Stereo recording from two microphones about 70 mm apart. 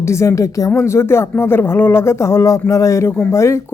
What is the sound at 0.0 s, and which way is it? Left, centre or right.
Speech, left.